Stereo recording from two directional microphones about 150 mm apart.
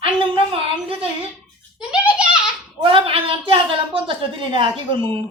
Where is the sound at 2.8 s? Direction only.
35° right (ahead or behind).